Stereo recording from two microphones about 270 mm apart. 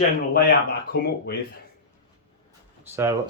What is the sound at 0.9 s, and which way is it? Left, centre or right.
Speech, left.